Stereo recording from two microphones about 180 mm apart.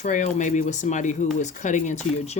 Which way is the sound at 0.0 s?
45° left (ahead or behind).